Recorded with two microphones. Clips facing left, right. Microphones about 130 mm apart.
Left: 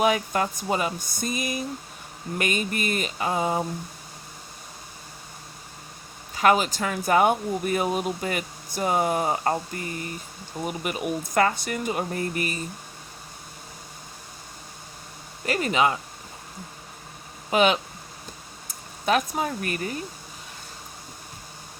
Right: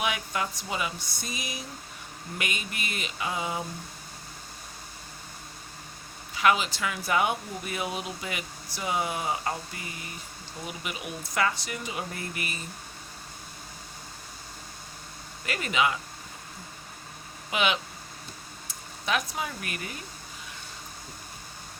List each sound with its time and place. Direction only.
0.0 s speech: 40° left (ahead or behind)
6.3 s speech: 45° left (ahead or behind)
15.4 s speech: 35° left (ahead or behind)
17.5 s speech: 40° left (ahead or behind)